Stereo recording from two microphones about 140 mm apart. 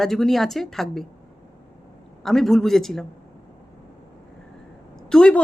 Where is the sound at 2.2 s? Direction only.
Centre (ahead or behind).